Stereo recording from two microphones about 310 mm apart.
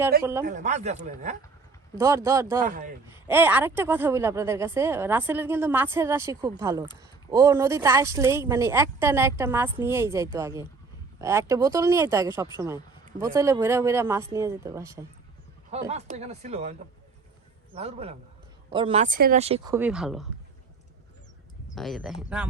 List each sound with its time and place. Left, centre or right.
0.2 s speech: centre
0.4 s speech: right
2.0 s speech: centre
2.6 s speech: right
3.2 s speech: centre
15.9 s speech: right
17.7 s speech: centre
21.8 s speech: centre